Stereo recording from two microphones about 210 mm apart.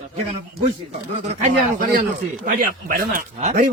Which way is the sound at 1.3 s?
35° right (ahead or behind).